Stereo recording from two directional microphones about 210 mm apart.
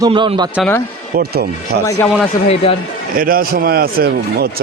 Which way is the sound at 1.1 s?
50° right (ahead or behind).